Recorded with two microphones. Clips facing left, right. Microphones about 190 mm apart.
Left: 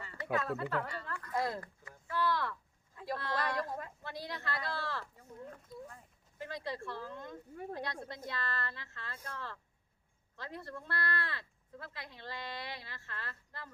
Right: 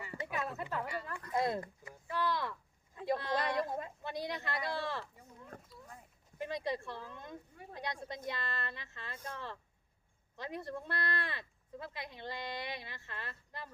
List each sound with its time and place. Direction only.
0.0 s speech: 15° right (ahead or behind)
1.9 s a sound: 15° right (ahead or behind)
5.7 s speech: 50° left (ahead or behind)
6.4 s speech: 15° right (ahead or behind)